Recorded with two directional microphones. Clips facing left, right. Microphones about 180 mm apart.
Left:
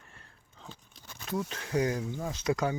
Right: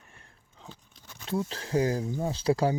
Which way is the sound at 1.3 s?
30° right (ahead or behind).